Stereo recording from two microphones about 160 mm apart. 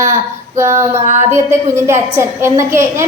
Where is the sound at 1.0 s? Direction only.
50° right (ahead or behind).